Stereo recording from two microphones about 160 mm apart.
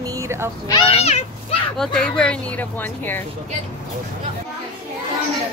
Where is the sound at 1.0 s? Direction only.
40° left (ahead or behind).